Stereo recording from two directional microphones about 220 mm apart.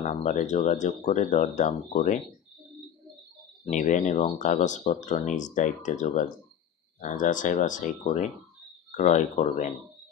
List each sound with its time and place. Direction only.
0.0 s speech: 30° left (ahead or behind)
3.6 s speech: 35° left (ahead or behind)